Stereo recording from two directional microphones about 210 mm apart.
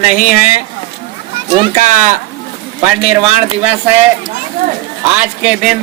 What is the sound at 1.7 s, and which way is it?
Speech, 35° right (ahead or behind).